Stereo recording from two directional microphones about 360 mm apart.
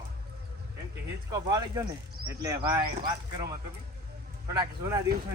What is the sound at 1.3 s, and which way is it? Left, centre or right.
Speech, centre.